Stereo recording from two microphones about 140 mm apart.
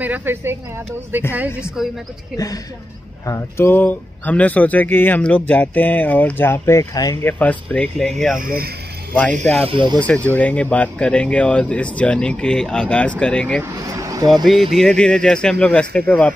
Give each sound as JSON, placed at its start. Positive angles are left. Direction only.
{"t": 0.0, "sound": "speech", "side_deg": -15}
{"t": 1.8, "sound": "speech", "side_deg": -5}
{"t": 2.3, "sound": "speech", "side_deg": 25}
{"t": 7.2, "sound": "speech", "side_deg": 10}
{"t": 8.4, "sound": "speech", "side_deg": -90}
{"t": 9.7, "sound": "speech", "side_deg": -35}
{"t": 9.9, "sound": "speech", "side_deg": 10}
{"t": 13.7, "sound": "speech", "side_deg": -25}
{"t": 14.3, "sound": "speech", "side_deg": 0}